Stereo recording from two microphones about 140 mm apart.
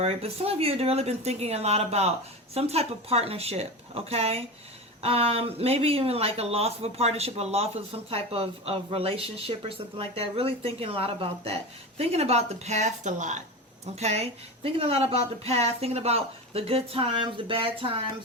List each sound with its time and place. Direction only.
0.0 s speech: 45° right (ahead or behind)